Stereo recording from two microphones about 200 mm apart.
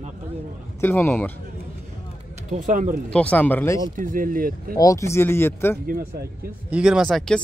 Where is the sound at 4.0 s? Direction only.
45° right (ahead or behind).